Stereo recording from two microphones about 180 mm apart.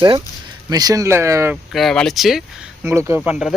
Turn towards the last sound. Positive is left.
turn(degrees=-5)  # may be behind; listen again after turning